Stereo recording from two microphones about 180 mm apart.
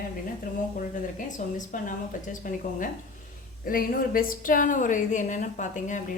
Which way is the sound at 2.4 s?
50° left (ahead or behind).